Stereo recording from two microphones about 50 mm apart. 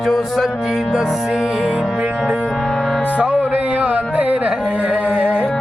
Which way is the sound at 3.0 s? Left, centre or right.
Right.